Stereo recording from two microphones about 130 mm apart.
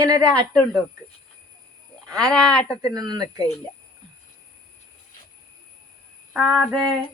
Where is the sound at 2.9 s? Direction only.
30° right (ahead or behind).